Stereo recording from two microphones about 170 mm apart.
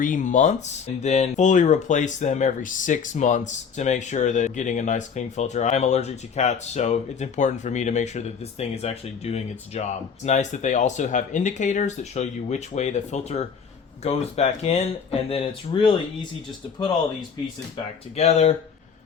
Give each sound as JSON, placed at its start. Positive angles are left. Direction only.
{"t": 0.0, "sound": "speech", "side_deg": 50}
{"t": 18.2, "sound": "speech", "side_deg": 40}